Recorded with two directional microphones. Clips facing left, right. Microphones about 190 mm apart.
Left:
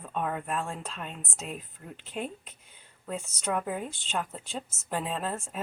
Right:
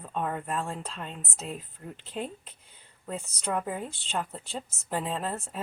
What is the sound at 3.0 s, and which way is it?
A woman's voice, centre (ahead or behind).